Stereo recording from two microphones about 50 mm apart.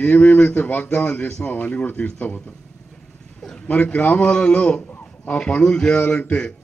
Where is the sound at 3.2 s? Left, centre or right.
Centre.